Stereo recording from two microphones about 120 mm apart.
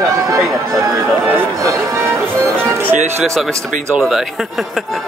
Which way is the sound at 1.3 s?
25° right (ahead or behind).